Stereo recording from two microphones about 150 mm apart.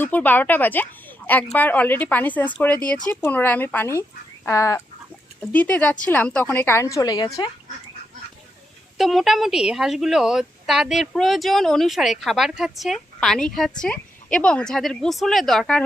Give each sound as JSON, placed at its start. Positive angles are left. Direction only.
{"t": 0.0, "sound": "a woman's voice", "side_deg": 10}
{"t": 4.4, "sound": "chicken", "side_deg": 20}
{"t": 5.4, "sound": "a woman's voice", "side_deg": 10}
{"t": 9.0, "sound": "speech", "side_deg": 0}